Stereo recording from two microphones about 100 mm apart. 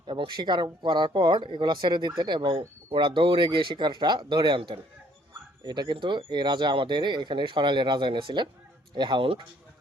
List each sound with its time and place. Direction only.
0.1 s speech: 50° right (ahead or behind)